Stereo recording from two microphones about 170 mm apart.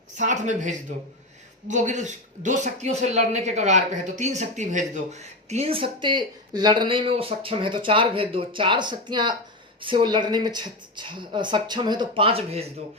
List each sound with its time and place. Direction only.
0.2 s speech: 45° right (ahead or behind)